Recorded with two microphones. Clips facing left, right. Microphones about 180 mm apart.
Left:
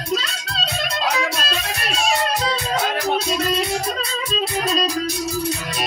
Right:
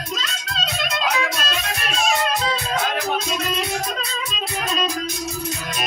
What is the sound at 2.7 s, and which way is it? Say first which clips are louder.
Music: left 3 dB; 35° left (ahead or behind).